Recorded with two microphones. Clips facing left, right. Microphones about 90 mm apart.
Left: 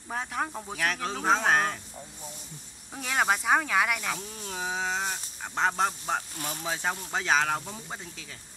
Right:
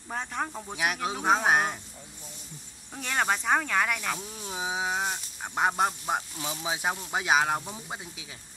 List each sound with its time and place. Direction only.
0.1 s speech: centre (ahead or behind)
0.7 s speech: 10° right (ahead or behind)
2.9 s speech: 5° left (ahead or behind); by 6.2 s 10° right (ahead or behind)
6.3 s speech: 50° left (ahead or behind)
6.6 s speech: 10° right (ahead or behind)